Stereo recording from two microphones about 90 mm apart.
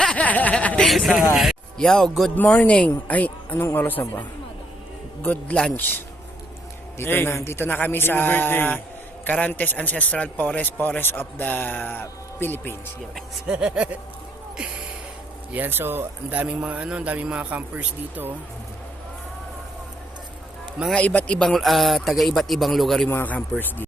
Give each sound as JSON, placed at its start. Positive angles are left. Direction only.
{"t": 0.0, "sound": "a sound", "side_deg": 10}
{"t": 0.9, "sound": "a man's voice", "side_deg": 0}
{"t": 2.3, "sound": "a man's voice", "side_deg": 15}
{"t": 5.2, "sound": "a man's voice", "side_deg": 15}
{"t": 7.0, "sound": "a man's voice", "side_deg": 25}
{"t": 13.5, "sound": "speech", "side_deg": -10}
{"t": 15.5, "sound": "speech", "side_deg": -25}
{"t": 20.9, "sound": "speech", "side_deg": 15}
{"t": 21.5, "sound": "a man's voice", "side_deg": 0}
{"t": 23.0, "sound": "a man's voice", "side_deg": 20}